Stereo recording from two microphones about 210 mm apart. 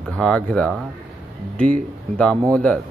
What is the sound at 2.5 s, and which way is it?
Speech, 5° left (ahead or behind).